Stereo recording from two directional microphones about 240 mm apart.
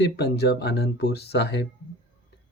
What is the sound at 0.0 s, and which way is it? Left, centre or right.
Speech, left.